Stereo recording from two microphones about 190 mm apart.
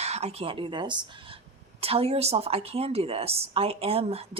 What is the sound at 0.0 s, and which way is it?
Speech, 35° right (ahead or behind).